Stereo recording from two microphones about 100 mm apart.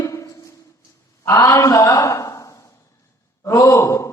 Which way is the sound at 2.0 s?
30° left (ahead or behind).